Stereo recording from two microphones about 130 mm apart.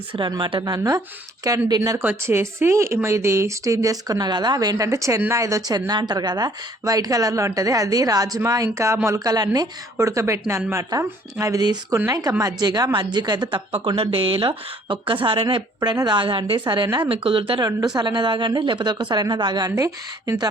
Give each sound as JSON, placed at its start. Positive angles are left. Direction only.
{"t": 0.1, "sound": "speech", "side_deg": -35}
{"t": 13.7, "sound": "speech", "side_deg": -45}